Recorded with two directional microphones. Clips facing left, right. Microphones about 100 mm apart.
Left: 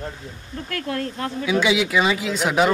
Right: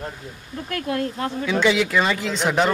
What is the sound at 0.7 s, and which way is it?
Speech, 20° right (ahead or behind).